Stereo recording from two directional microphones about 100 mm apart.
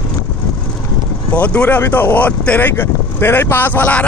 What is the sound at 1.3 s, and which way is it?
Speech, 15° left (ahead or behind).